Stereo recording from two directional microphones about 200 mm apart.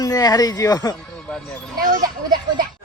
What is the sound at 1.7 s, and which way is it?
Speech, 40° right (ahead or behind).